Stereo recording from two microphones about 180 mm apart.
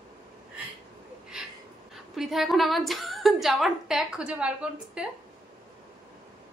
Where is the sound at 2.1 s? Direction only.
Centre (ahead or behind).